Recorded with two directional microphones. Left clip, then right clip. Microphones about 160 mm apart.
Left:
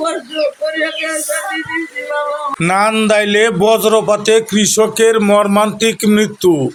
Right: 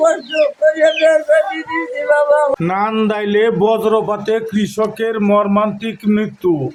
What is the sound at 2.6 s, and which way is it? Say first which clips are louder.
A man's voice: left 4 dB; 30° left (ahead or behind).